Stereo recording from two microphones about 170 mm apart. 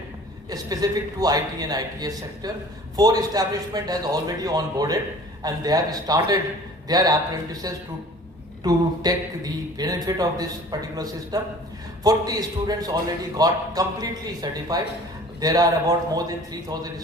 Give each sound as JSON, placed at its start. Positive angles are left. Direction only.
{"t": 0.5, "sound": "a man's voice", "side_deg": -20}
{"t": 8.6, "sound": "a man's voice", "side_deg": -20}